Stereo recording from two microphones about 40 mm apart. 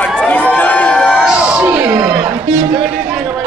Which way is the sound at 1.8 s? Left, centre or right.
Right.